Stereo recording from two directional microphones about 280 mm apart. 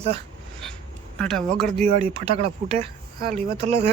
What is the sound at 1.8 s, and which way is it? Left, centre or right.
Speech, right.